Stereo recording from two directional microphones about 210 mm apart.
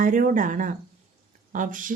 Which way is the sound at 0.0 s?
40° right (ahead or behind).